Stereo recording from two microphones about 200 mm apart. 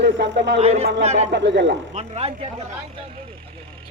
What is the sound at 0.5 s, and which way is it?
Speech, 30° right (ahead or behind).